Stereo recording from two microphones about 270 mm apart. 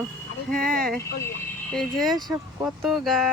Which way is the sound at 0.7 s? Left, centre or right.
Right.